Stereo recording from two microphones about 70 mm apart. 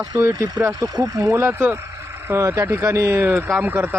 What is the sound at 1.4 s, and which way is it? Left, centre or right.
Speech, right.